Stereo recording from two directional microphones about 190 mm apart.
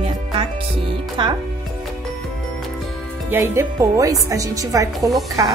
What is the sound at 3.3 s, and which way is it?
A woman's voice, 15° right (ahead or behind).